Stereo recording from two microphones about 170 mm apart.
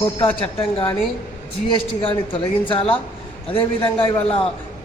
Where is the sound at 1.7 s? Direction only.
30° left (ahead or behind).